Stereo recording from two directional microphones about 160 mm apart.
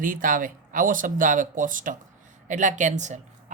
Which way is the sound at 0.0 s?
60° right (ahead or behind).